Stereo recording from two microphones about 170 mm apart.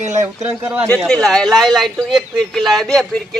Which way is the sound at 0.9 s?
5° left (ahead or behind).